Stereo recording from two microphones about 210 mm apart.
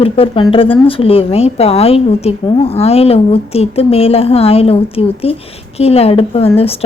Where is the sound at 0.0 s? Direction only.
25° left (ahead or behind).